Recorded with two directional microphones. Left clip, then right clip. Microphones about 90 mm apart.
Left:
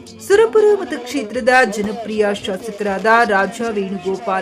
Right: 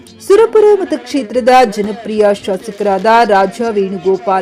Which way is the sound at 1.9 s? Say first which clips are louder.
Right 3 dB; 50° left (ahead or behind).